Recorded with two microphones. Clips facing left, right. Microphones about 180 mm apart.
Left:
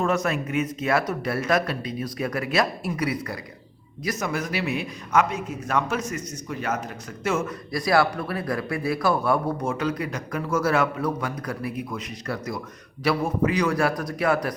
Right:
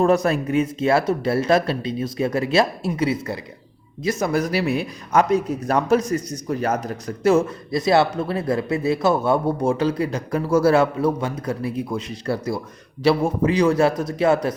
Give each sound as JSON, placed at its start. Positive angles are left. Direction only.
{"t": 0.0, "sound": "a man's voice", "side_deg": -35}